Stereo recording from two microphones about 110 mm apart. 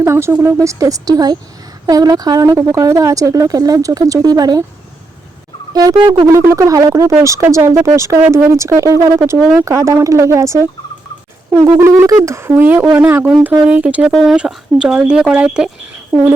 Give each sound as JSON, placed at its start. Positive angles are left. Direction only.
{"t": 0.0, "sound": "speech", "side_deg": -25}
{"t": 0.6, "sound": "speech", "side_deg": -30}
{"t": 5.7, "sound": "speech", "side_deg": -35}
{"t": 11.8, "sound": "speech", "side_deg": -25}
{"t": 14.1, "sound": "speech", "side_deg": 0}